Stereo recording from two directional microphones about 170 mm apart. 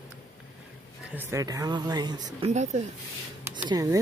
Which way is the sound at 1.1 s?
15° right (ahead or behind).